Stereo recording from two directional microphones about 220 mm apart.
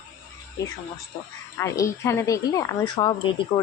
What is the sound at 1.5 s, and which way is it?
A woman's voice, 15° left (ahead or behind).